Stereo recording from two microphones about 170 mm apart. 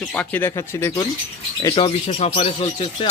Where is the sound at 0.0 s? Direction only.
10° left (ahead or behind).